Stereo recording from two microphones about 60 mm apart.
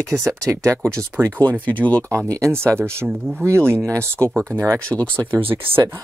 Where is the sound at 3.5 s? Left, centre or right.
Right.